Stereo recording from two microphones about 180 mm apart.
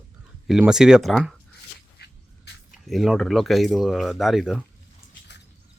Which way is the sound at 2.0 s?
65° left (ahead or behind).